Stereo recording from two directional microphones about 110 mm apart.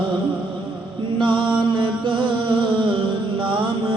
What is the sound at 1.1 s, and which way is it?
Mantra, 50° right (ahead or behind).